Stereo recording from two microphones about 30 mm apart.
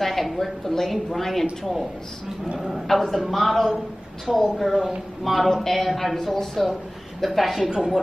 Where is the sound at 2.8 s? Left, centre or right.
Centre.